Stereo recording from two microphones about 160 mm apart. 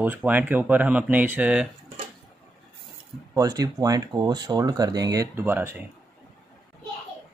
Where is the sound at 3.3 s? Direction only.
20° right (ahead or behind).